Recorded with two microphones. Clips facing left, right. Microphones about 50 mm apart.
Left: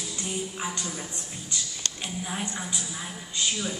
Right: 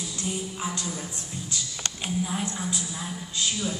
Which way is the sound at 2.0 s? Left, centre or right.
Centre.